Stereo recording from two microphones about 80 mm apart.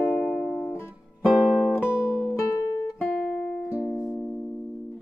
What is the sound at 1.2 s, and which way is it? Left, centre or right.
Music, centre.